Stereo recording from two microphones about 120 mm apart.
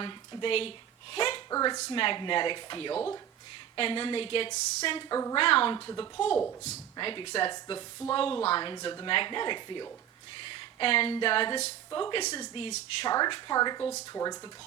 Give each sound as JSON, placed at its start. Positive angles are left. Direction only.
{"t": 0.0, "sound": "speech", "side_deg": 45}
{"t": 1.1, "sound": "a sound", "side_deg": 50}
{"t": 1.5, "sound": "a woman's voice", "side_deg": 30}
{"t": 1.9, "sound": "speech", "side_deg": 45}
{"t": 5.0, "sound": "a woman's voice", "side_deg": 30}
{"t": 5.4, "sound": "speech", "side_deg": 50}
{"t": 5.9, "sound": "a woman's voice", "side_deg": 40}
{"t": 11.9, "sound": "a woman's voice", "side_deg": 35}